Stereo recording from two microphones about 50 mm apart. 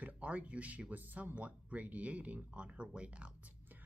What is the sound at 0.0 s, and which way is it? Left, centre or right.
Speech, right.